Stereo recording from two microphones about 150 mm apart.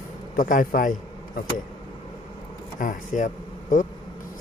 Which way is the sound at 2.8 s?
60° left (ahead or behind).